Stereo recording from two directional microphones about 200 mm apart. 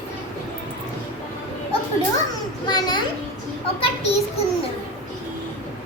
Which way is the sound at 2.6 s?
20° left (ahead or behind).